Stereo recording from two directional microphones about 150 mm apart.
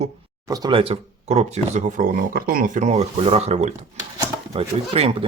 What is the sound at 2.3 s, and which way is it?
Speech, 75° right (ahead or behind).